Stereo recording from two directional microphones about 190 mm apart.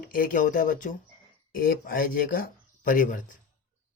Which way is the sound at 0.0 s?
45° left (ahead or behind).